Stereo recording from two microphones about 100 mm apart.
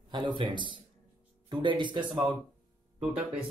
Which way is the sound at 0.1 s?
50° right (ahead or behind).